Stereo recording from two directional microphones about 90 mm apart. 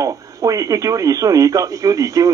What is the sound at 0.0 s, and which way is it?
Speech, 40° right (ahead or behind).